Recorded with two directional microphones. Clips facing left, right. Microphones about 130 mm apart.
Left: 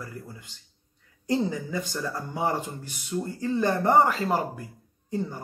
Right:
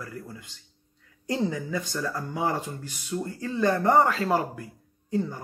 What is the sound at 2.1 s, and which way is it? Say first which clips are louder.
Speech: left 1 dB; 25° left (ahead or behind).